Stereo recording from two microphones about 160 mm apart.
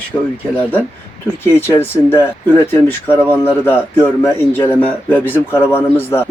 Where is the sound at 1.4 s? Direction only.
15° left (ahead or behind).